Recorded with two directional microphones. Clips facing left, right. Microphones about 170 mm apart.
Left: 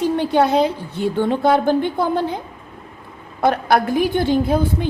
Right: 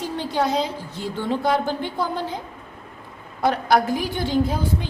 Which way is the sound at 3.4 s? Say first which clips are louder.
Left 3 dB; 55° left (ahead or behind).